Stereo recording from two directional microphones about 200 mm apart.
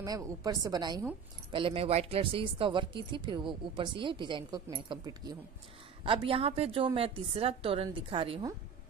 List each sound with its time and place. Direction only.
0.0 s speech: 15° right (ahead or behind)